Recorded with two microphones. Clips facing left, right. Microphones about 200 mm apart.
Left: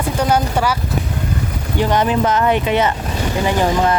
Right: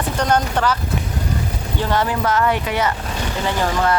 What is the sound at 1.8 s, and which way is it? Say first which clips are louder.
Speech: left 4 dB; 20° left (ahead or behind).